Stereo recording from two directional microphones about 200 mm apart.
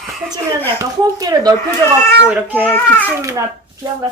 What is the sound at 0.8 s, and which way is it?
Speech, 15° right (ahead or behind).